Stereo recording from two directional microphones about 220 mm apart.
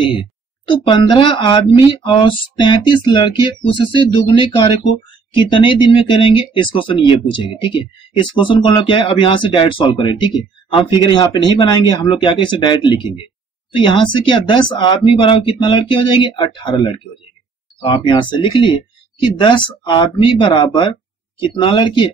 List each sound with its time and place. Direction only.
0.7 s speech: 20° left (ahead or behind)